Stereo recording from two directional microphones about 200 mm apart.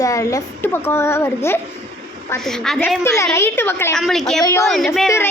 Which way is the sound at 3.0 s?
15° left (ahead or behind).